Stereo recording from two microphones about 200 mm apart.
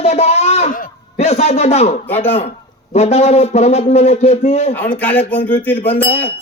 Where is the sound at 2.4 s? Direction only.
30° left (ahead or behind).